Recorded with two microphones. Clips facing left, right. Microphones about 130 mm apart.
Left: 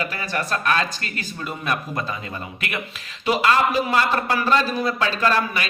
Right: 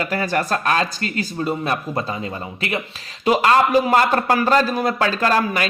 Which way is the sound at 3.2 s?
40° right (ahead or behind).